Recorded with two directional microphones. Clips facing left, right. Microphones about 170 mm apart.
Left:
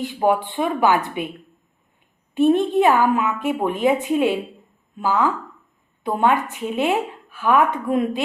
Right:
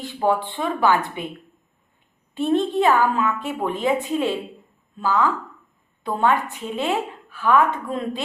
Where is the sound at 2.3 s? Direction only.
15° left (ahead or behind).